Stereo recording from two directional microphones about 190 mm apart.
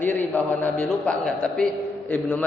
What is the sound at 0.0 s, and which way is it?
A man's voice, 10° left (ahead or behind).